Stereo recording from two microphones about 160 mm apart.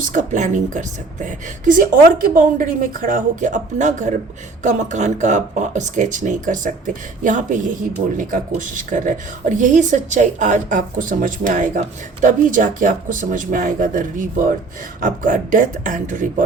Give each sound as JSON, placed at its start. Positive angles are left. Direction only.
{"t": 0.0, "sound": "speech", "side_deg": -55}